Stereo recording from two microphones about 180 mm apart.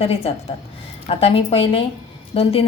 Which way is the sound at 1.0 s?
30° left (ahead or behind).